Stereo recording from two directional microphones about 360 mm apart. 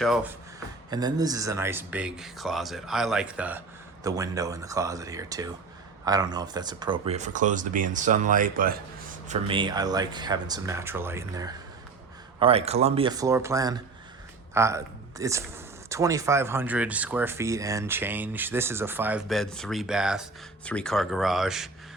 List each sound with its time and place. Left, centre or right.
0.0 s speech: centre
0.9 s speech: centre